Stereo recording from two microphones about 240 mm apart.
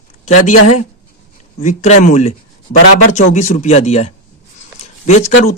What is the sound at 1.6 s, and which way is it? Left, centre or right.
Speech, left.